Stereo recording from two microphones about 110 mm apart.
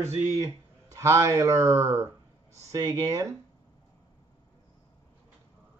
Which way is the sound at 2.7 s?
30° right (ahead or behind).